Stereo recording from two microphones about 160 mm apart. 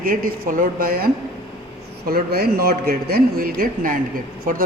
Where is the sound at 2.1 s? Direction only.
70° right (ahead or behind).